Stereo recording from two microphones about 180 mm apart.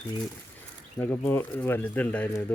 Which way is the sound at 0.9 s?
15° left (ahead or behind).